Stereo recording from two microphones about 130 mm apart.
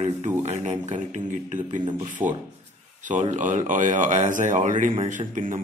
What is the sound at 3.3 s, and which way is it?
Speech, 75° right (ahead or behind).